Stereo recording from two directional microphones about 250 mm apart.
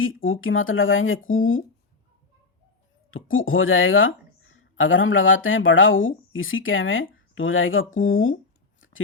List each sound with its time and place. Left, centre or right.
0.0 s speech: left
3.1 s a woman's voice: left